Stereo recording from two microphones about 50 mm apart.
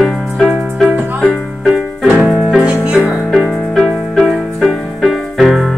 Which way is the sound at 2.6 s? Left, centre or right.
Right.